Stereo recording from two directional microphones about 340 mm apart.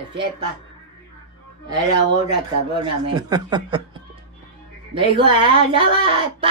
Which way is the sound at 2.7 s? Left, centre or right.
Centre.